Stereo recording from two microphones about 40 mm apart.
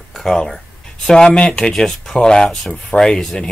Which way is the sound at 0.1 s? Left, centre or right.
Centre.